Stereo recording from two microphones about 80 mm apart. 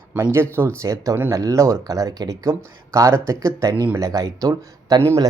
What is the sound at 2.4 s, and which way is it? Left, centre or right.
Speech, right.